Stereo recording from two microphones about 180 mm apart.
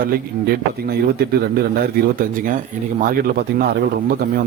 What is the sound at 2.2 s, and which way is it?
A man's voice, 50° right (ahead or behind).